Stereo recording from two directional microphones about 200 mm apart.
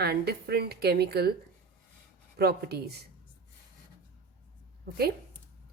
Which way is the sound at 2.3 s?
50° right (ahead or behind).